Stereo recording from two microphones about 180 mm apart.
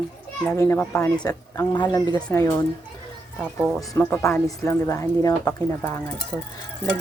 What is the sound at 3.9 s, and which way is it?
Speech, 15° left (ahead or behind).